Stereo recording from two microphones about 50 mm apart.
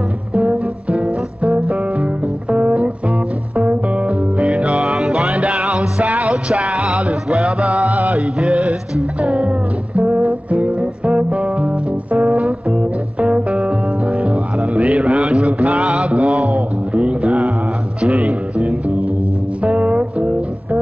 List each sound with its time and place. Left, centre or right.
0.3 s music: right
16.4 s a sound: right
18.0 s music: right